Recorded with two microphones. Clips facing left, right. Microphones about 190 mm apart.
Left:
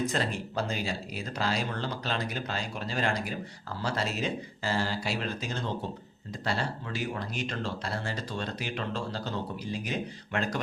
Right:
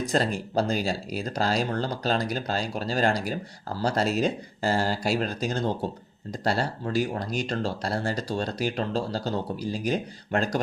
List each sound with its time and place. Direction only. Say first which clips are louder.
0.1 s speech: right 6 dB; 40° right (ahead or behind)